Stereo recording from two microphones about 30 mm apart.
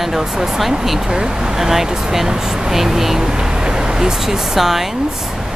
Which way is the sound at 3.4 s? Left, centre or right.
Right.